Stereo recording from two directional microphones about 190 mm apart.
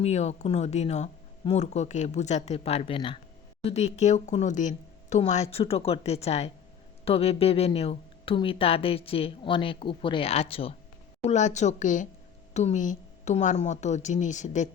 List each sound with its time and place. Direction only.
0.0 s speech: 35° left (ahead or behind)